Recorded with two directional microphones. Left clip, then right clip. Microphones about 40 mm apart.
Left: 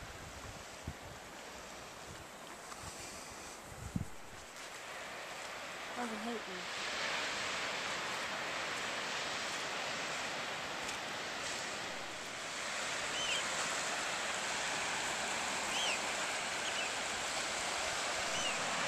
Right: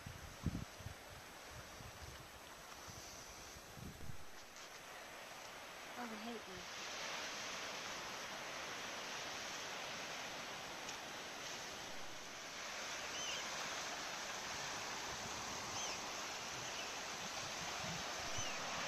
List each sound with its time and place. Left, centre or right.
5.9 s ocean: centre
13.4 s stream: centre
13.8 s stream: centre
14.5 s waterfall: left
14.9 s stream: left
16.0 s waterfall: left; by 18.9 s centre